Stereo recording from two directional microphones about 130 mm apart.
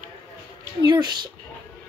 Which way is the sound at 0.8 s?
35° right (ahead or behind).